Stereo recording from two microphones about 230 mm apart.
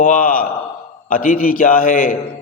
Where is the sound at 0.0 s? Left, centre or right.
Left.